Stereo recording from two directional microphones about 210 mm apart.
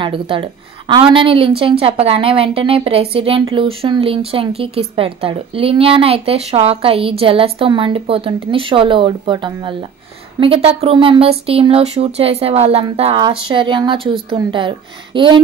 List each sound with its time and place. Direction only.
0.0 s a woman's voice: 25° right (ahead or behind)